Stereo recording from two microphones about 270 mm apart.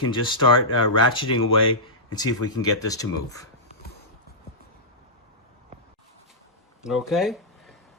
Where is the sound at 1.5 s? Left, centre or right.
Left.